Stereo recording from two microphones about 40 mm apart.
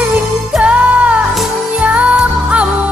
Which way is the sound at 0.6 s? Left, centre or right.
Right.